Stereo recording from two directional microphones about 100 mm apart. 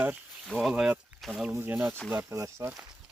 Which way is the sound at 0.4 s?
5° right (ahead or behind).